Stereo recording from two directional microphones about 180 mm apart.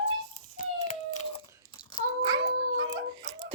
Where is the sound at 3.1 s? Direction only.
25° right (ahead or behind).